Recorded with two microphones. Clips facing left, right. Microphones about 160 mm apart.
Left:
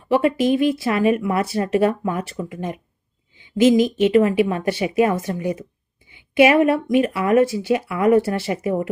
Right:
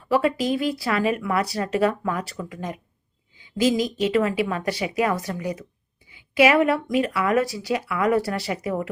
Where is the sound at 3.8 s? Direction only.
30° right (ahead or behind).